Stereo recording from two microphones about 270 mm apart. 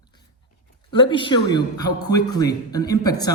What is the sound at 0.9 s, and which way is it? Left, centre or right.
A man's voice, centre.